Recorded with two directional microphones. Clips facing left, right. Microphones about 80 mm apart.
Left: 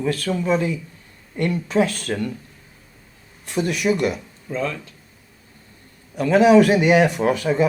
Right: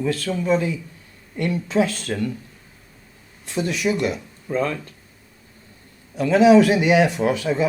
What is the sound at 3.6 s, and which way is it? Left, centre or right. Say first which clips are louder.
Speech: left 1 dB; left.